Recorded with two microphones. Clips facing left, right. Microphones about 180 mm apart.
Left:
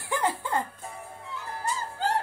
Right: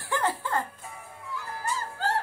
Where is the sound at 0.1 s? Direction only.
15° left (ahead or behind).